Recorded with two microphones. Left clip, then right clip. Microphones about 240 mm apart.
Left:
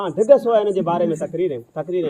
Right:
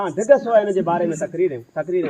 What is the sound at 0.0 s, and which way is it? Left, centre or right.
A man's voice, left.